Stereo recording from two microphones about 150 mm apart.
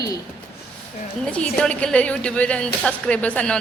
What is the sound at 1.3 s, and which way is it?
A woman's voice, 5° left (ahead or behind).